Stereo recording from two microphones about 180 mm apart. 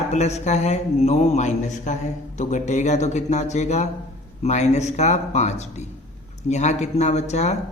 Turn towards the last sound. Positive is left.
turn(degrees=40)  # may be behind; listen again after turning